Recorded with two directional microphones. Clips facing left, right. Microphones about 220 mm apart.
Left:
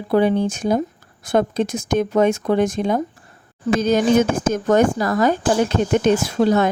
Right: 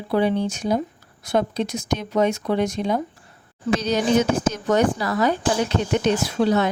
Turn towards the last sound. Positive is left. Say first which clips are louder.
# left 3 dB
turn(degrees=45)  # may be behind; listen again after turning